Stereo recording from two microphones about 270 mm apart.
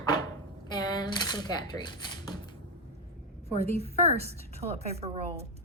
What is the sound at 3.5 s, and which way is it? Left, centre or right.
A woman's voice, right.